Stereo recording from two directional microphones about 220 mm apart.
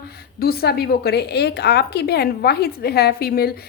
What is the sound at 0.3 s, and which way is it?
A woman's voice, 45° left (ahead or behind).